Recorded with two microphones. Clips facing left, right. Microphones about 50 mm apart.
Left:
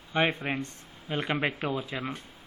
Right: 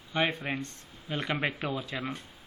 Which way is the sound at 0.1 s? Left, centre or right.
Left.